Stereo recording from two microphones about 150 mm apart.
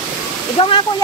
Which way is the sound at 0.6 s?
35° left (ahead or behind).